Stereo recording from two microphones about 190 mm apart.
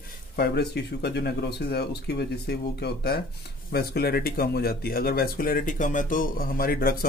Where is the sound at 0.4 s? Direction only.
60° left (ahead or behind).